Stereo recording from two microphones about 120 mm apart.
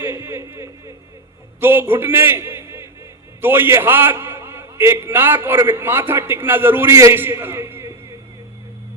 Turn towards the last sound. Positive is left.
turn(degrees=-20)  # may be behind; listen again after turning